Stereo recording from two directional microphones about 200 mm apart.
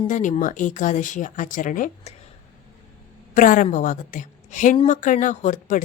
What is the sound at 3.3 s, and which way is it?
Speech, 40° left (ahead or behind).